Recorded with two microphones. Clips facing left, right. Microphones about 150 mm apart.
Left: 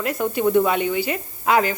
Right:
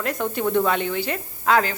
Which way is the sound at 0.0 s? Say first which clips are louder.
Left 3 dB; 10° left (ahead or behind).